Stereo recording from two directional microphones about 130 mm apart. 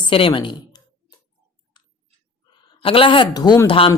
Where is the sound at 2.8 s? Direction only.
45° left (ahead or behind).